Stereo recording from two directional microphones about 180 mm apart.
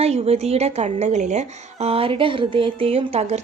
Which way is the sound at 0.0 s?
35° right (ahead or behind).